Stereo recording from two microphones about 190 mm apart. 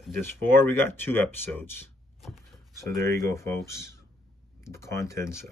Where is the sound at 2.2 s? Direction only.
Centre (ahead or behind).